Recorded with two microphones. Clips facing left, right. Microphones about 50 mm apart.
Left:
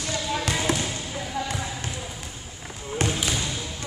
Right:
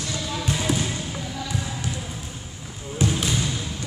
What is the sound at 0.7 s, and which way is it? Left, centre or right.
Basketball bounce, left.